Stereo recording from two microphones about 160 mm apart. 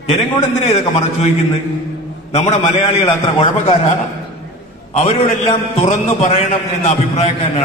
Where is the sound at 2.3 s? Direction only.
45° left (ahead or behind).